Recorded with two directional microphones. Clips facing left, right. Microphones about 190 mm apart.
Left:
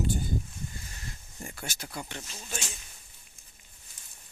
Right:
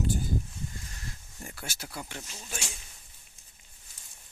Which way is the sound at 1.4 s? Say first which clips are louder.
Left 1 dB; 5° right (ahead or behind).